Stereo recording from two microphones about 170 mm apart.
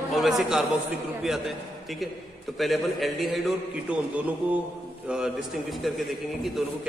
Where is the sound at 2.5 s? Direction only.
Centre (ahead or behind).